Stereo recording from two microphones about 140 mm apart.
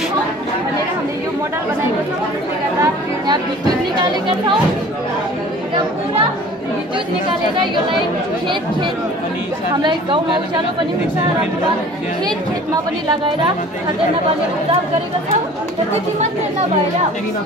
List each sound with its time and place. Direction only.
2.8 s chatter: 30° right (ahead or behind)
9.8 s a woman's voice: 35° right (ahead or behind)